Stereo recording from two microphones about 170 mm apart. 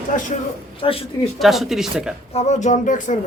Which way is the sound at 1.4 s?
Centre (ahead or behind).